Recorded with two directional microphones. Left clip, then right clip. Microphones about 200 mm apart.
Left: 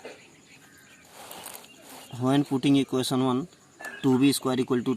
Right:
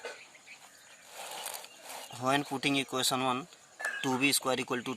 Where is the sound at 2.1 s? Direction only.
10° right (ahead or behind).